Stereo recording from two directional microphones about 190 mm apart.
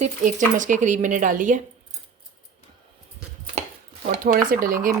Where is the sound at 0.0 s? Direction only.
40° right (ahead or behind).